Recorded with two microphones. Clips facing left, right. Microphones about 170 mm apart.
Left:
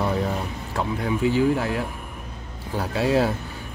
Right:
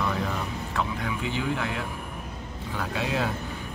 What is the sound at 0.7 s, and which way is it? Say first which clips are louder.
Speech: left 6 dB; 35° left (ahead or behind).